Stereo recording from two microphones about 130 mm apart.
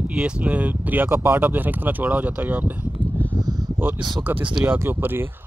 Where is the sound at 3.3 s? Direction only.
30° right (ahead or behind).